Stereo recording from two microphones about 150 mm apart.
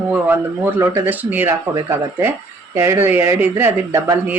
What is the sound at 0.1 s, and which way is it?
Speech, 15° right (ahead or behind).